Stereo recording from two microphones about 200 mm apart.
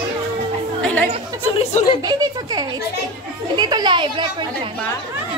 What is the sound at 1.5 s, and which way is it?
Speech, 30° left (ahead or behind).